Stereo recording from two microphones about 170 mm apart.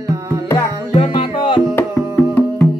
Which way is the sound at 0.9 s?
30° left (ahead or behind).